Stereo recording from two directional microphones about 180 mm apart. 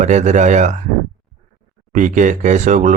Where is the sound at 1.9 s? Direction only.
45° right (ahead or behind).